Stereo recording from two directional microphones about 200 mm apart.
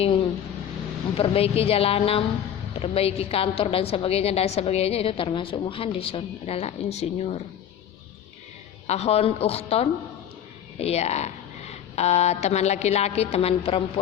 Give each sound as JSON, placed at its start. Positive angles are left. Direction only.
{"t": 1.1, "sound": "a woman's voice", "side_deg": 30}
{"t": 8.9, "sound": "a woman's voice", "side_deg": 30}